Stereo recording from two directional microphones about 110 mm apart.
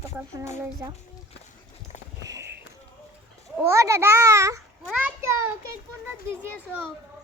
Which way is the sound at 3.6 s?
25° right (ahead or behind).